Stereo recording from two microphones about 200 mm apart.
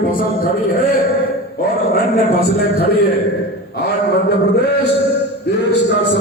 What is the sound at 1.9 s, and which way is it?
A man's voice, 50° left (ahead or behind).